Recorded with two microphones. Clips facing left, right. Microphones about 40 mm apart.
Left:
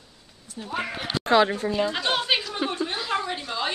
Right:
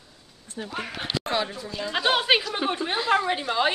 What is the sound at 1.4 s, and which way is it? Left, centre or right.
Speech, left.